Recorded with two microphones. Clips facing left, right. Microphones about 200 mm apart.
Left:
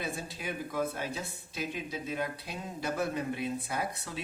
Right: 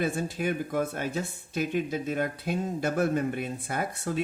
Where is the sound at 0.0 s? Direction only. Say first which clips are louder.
Right 9 dB; 50° right (ahead or behind).